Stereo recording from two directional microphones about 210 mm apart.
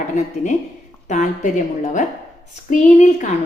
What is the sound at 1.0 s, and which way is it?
A woman's voice, 35° left (ahead or behind).